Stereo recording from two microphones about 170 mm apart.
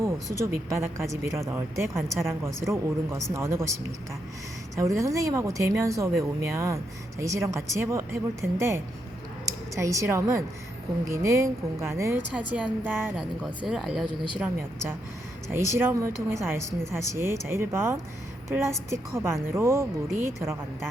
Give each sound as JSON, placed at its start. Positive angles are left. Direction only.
{"t": 0.0, "sound": "speech", "side_deg": -15}
{"t": 4.8, "sound": "speech", "side_deg": -20}